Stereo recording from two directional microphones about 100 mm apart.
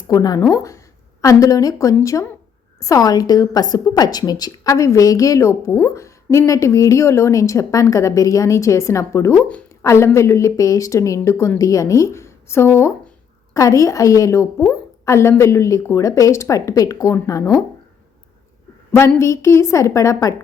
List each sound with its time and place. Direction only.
0.1 s a woman's voice: 40° left (ahead or behind)
19.2 s a woman's voice: 30° left (ahead or behind)